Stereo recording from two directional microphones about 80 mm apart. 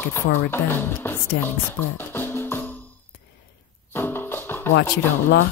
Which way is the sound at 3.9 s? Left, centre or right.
Left.